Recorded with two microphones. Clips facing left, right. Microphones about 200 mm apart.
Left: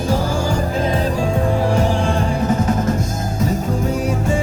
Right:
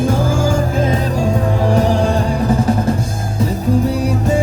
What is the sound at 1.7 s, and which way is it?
Music, 40° right (ahead or behind).